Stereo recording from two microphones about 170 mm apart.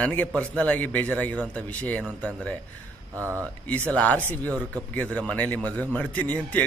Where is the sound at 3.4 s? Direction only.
5° left (ahead or behind).